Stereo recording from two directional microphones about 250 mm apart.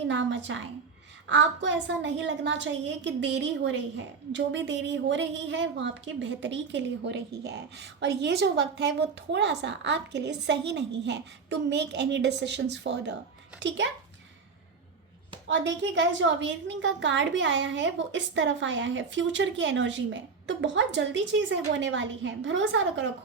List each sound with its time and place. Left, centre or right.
0.1 s a woman's voice: right
15.4 s a woman's voice: right